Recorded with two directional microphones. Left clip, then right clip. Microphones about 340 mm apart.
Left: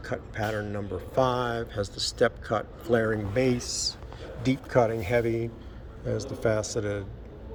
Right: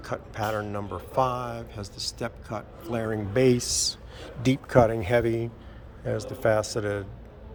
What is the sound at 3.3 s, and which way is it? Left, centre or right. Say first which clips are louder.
Speech: right 4 dB; centre.